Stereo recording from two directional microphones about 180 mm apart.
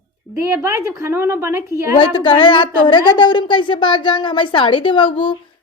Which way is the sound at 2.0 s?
30° left (ahead or behind).